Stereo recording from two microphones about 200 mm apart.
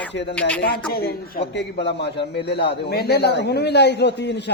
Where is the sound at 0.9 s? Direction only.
50° left (ahead or behind).